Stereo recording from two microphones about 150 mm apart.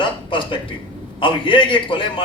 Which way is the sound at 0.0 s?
35° left (ahead or behind).